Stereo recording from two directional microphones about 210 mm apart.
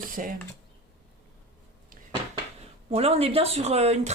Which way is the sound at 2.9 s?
30° right (ahead or behind).